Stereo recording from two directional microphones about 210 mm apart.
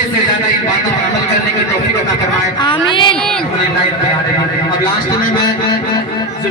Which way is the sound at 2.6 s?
25° left (ahead or behind).